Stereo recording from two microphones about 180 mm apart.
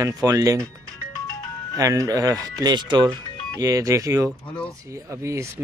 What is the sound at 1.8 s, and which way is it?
Speech, 20° right (ahead or behind).